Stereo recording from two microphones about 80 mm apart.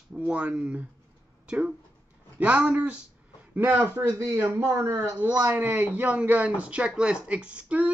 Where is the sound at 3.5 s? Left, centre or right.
Right.